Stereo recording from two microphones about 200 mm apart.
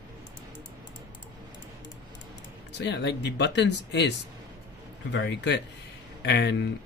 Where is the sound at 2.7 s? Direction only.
60° left (ahead or behind).